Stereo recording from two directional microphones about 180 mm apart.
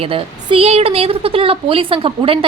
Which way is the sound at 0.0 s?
30° right (ahead or behind).